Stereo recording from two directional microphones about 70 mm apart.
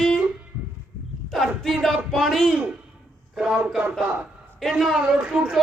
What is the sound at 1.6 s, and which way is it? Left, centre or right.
Speech, centre.